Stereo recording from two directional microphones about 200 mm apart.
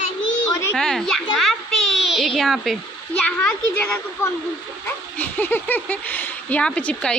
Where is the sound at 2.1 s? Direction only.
Centre (ahead or behind).